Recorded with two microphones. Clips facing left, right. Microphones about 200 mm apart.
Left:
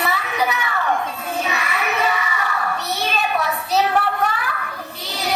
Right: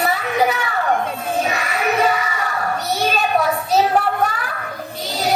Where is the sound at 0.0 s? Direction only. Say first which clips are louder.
Right 4 dB; 45° right (ahead or behind).